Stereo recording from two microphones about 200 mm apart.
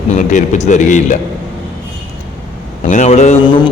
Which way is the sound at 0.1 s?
40° left (ahead or behind).